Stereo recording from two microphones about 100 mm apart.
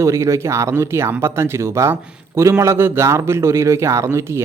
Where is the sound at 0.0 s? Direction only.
30° right (ahead or behind).